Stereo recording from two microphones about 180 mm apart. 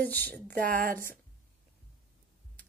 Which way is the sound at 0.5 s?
50° right (ahead or behind).